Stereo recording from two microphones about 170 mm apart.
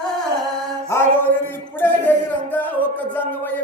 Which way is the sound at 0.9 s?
15° left (ahead or behind).